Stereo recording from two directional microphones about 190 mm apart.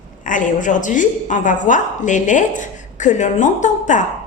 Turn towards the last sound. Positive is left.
turn(degrees=40)  # may be behind; listen again after turning